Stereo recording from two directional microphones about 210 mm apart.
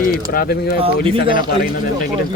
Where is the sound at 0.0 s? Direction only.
45° left (ahead or behind).